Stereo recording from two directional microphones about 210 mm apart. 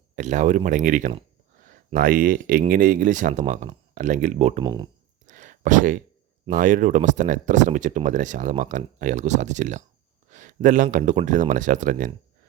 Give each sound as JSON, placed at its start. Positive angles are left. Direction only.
{"t": 0.2, "sound": "speech", "side_deg": -35}
{"t": 4.6, "sound": "speech", "side_deg": -20}
{"t": 5.2, "sound": "a sound", "side_deg": -35}
{"t": 6.5, "sound": "speech", "side_deg": -40}